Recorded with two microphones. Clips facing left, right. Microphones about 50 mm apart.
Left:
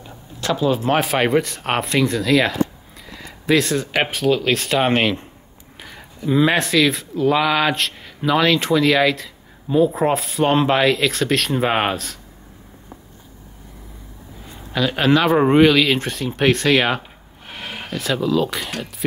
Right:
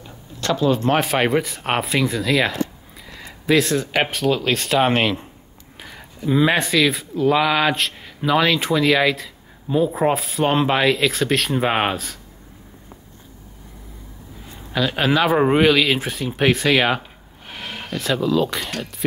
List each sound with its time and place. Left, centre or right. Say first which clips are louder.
0.4 s speech: even; centre
14.7 s speech: left 2 dB; centre